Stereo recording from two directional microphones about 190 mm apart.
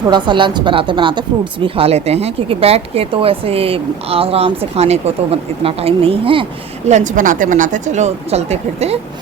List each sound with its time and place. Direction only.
0.1 s speech: 25° right (ahead or behind)